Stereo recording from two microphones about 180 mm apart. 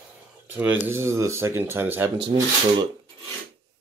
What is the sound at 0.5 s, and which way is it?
Speech, 10° right (ahead or behind).